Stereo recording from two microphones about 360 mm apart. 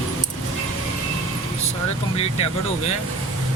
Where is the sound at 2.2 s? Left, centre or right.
Centre.